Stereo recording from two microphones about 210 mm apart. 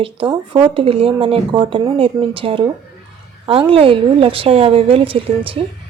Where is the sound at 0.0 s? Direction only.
25° right (ahead or behind).